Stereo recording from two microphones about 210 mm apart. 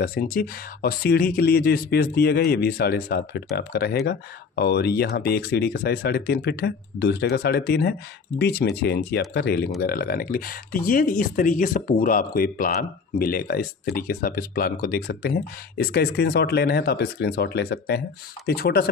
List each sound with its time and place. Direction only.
0.0 s speech: 45° left (ahead or behind)